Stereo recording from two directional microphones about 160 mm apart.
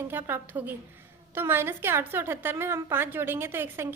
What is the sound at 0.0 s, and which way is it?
A woman's voice, 15° right (ahead or behind).